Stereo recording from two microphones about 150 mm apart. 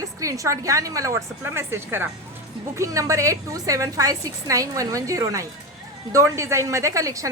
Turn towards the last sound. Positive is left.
turn(degrees=-20)  # may be behind; listen again after turning